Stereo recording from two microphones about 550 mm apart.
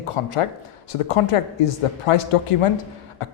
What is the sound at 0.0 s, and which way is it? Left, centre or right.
Speech, left.